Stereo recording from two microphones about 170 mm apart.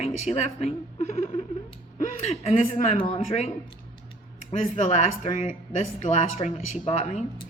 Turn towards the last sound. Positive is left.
turn(degrees=45)  # may be behind; listen again after turning